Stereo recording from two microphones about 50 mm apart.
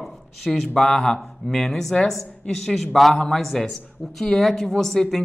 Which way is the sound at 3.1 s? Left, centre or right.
Centre.